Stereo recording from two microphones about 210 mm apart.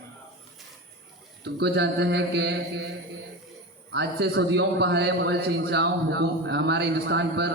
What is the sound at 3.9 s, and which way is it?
Speech, 50° right (ahead or behind).